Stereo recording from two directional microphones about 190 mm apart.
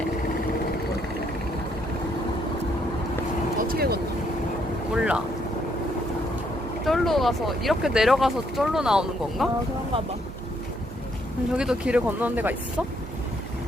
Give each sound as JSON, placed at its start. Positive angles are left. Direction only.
{"t": 3.6, "sound": "vehicle", "side_deg": -50}
{"t": 4.9, "sound": "boat", "side_deg": -5}
{"t": 6.8, "sound": "speech", "side_deg": 0}
{"t": 11.5, "sound": "speech", "side_deg": -5}